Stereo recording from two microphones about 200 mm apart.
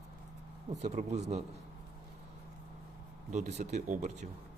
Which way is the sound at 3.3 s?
35° right (ahead or behind).